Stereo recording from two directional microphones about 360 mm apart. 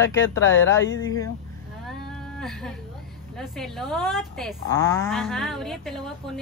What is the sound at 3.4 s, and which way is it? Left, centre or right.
Speech, centre.